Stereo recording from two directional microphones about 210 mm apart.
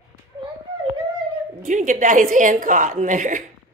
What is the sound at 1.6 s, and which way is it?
A woman's voice, 35° right (ahead or behind).